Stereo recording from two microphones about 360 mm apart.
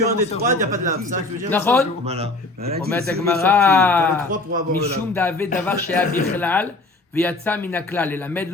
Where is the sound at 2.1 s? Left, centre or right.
Centre.